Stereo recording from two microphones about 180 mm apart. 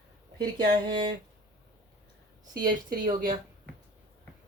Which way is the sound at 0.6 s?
55° right (ahead or behind).